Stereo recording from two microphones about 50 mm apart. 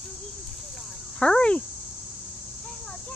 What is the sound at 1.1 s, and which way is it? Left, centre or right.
Speech, centre.